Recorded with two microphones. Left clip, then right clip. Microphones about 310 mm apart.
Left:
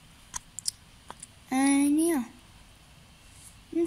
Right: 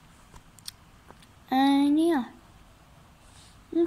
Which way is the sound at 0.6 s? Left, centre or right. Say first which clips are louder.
Left 4 dB; centre.